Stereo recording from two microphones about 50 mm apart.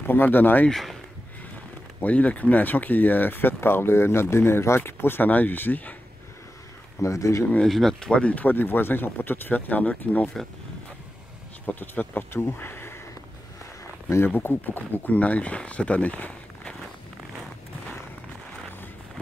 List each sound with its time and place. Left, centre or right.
0.0 s speech: left
0.7 s speech: centre
2.0 s speech: left
7.0 s speech: left
7.6 s speech: centre
8.0 s speech: left
11.6 s speech: left
12.3 s speech: left
14.0 s speech: left
14.3 s speech: left